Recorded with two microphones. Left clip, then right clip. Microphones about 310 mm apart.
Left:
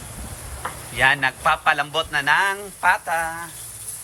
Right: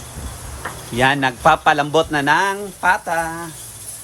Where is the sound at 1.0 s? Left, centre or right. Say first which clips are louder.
Right 2 dB; centre.